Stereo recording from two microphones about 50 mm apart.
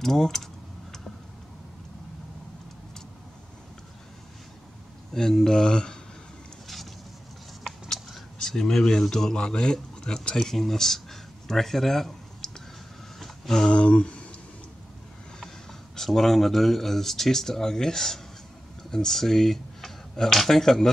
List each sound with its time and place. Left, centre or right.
0.0 s speech: centre
5.1 s speech: centre
8.4 s speech: centre
13.2 s a sound: centre
13.7 s speech: left
16.0 s speech: centre